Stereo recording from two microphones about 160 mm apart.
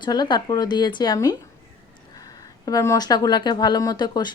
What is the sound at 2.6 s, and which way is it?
A woman's voice, 20° left (ahead or behind).